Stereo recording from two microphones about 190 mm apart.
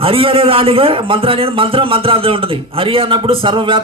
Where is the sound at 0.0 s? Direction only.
30° right (ahead or behind).